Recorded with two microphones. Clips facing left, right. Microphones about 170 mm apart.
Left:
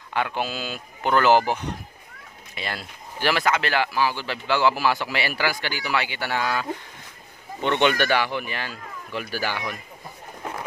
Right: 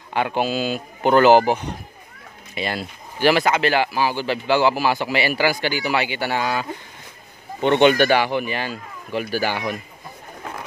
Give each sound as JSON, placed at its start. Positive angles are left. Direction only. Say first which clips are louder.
{"t": 0.1, "sound": "speech", "louder": "right 5 dB", "side_deg": -20}
{"t": 5.0, "sound": "speech", "louder": "right 6 dB", "side_deg": -10}
{"t": 7.6, "sound": "a man's voice", "louder": "right 6 dB", "side_deg": -35}
{"t": 8.2, "sound": "speech", "louder": "right 5 dB", "side_deg": -20}
{"t": 9.1, "sound": "a man's voice", "louder": "right 7 dB", "side_deg": -35}